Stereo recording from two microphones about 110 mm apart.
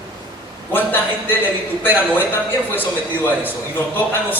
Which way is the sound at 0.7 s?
15° left (ahead or behind).